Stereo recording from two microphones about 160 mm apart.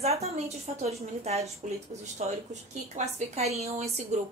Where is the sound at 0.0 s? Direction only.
40° right (ahead or behind).